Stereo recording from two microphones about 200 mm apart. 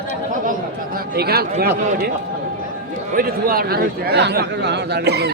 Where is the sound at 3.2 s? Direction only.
45° right (ahead or behind).